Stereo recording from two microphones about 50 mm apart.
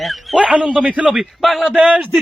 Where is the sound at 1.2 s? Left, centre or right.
Centre.